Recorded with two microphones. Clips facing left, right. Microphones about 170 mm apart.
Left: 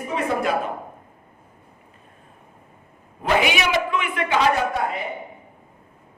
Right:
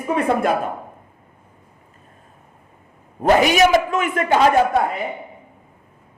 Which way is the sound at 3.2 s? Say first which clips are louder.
Right 7 dB; 40° right (ahead or behind).